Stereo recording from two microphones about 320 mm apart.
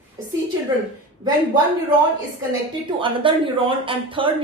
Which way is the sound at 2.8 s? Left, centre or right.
Centre.